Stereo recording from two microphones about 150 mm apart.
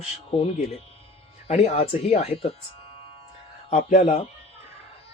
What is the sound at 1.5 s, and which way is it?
Speech, 45° left (ahead or behind).